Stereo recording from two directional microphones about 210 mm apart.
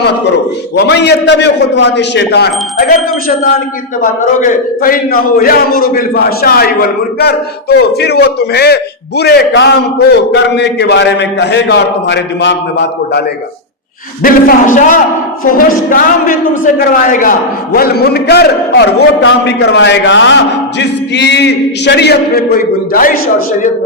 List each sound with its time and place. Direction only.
0.9 s speech: 55° left (ahead or behind)
14.2 s a man's voice: 40° left (ahead or behind)